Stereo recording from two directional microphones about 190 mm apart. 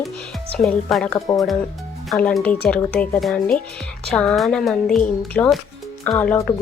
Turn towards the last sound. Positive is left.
turn(degrees=10)  # may be behind; listen again after turning